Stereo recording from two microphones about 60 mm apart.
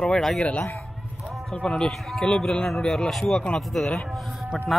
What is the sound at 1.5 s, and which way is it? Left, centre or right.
Speech, centre.